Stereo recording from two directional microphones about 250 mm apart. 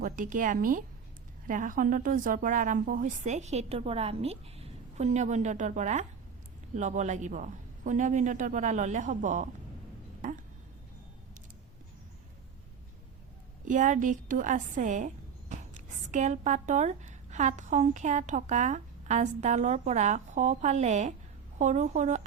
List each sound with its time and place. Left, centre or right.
0.0 s speech: right
13.7 s speech: right